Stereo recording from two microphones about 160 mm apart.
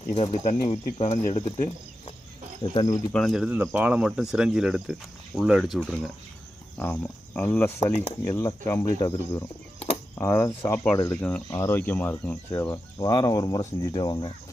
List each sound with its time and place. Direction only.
0.1 s speech: 45° left (ahead or behind)
3.1 s speech: centre (ahead or behind)
8.8 s speech: 25° left (ahead or behind)